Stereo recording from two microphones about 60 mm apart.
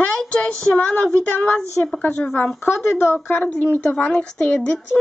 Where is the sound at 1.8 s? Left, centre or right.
Left.